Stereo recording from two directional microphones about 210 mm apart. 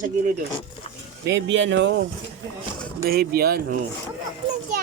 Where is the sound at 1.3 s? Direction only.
60° right (ahead or behind).